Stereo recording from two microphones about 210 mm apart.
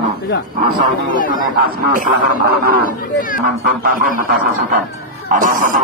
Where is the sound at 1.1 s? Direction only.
40° left (ahead or behind).